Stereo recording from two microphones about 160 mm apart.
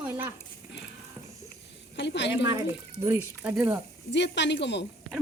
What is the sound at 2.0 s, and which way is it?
Speech, 90° left.